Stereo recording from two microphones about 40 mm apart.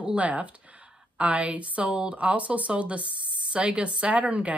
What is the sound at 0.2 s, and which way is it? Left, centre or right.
Speech, right.